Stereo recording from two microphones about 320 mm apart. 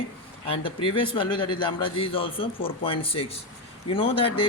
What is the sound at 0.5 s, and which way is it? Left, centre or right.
A man's voice, centre.